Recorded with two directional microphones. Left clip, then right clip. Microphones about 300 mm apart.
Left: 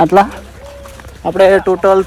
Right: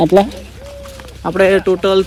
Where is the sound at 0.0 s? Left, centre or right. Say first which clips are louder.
Left 2 dB; centre.